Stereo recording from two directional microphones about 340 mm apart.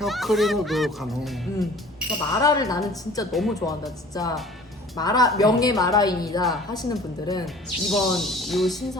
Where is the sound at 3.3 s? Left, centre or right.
Centre.